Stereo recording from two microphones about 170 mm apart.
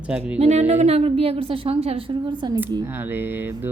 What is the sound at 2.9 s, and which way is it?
Speech, 10° right (ahead or behind).